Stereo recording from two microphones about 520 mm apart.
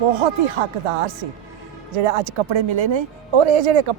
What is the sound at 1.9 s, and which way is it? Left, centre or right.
Speech, right.